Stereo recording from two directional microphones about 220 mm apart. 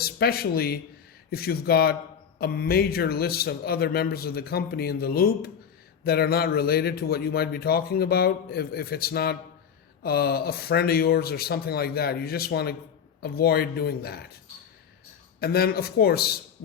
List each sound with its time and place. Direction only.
0.0 s speech: 45° left (ahead or behind)
15.4 s speech: 45° left (ahead or behind)